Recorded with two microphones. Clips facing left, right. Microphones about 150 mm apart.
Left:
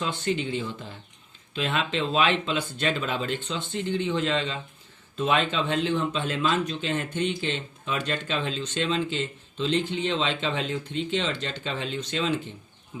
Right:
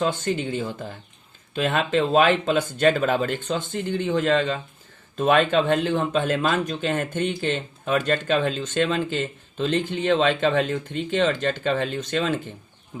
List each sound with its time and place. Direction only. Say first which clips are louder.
0.0 s speech: right 4 dB; 45° right (ahead or behind)